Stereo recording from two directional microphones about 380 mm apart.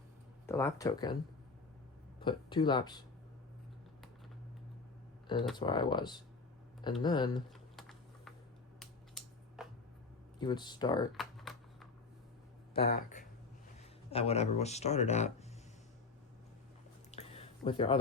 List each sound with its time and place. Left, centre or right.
0.4 s speech: centre
2.2 s speech: centre
5.5 s speech: centre
7.8 s typing: centre
8.8 s a sound: centre
10.4 s speech: centre
11.1 s a sound: centre
12.7 s speech: left
17.1 s a sound: centre